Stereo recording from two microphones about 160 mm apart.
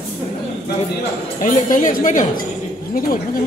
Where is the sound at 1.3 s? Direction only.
55° left (ahead or behind).